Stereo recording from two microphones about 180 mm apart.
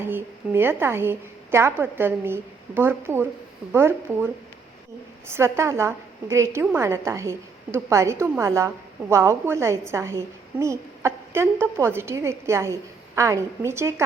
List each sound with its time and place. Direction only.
0.0 s a woman's voice: 10° right (ahead or behind)
5.3 s a woman's voice: 15° right (ahead or behind)